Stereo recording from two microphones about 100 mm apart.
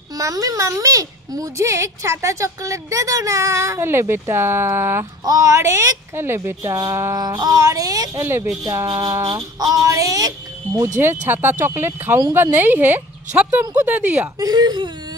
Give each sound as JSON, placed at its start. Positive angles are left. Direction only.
{"t": 0.1, "sound": "a child's voice", "side_deg": -35}
{"t": 7.2, "sound": "a child's voice", "side_deg": -40}
{"t": 11.0, "sound": "speech", "side_deg": -20}
{"t": 14.4, "sound": "speech", "side_deg": -45}